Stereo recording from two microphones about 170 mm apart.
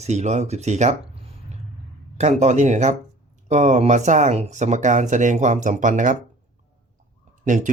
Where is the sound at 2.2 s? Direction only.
40° right (ahead or behind).